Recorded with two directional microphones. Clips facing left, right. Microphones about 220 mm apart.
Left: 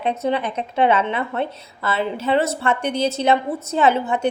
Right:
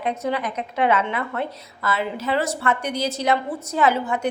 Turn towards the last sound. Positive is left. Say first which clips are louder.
# left 2 dB
turn(degrees=25)  # may be behind; listen again after turning